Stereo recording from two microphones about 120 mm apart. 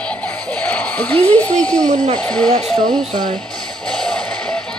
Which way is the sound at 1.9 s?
90° right.